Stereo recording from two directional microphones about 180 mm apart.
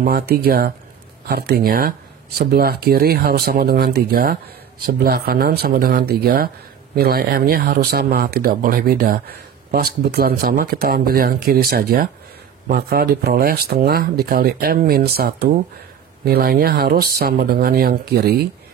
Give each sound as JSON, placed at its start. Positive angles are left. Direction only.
{"t": 0.0, "sound": "speech", "side_deg": -60}